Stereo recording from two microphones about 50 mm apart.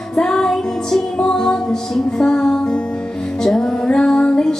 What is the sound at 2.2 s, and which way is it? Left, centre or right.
Music, centre.